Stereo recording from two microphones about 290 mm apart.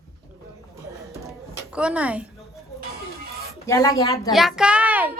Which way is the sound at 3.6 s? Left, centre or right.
Centre.